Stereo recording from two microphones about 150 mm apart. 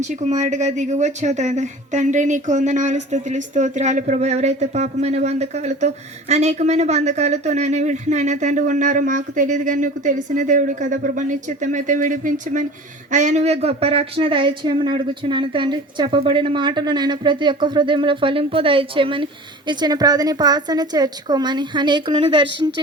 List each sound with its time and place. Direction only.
0.0 s speech: 50° right (ahead or behind); by 22.7 s 30° right (ahead or behind)